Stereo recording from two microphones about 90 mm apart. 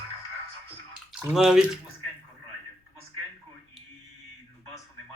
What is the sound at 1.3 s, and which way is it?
Speech, 10° right (ahead or behind).